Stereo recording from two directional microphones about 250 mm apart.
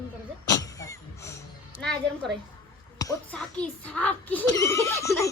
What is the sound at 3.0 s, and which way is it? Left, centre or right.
A child's voice, centre.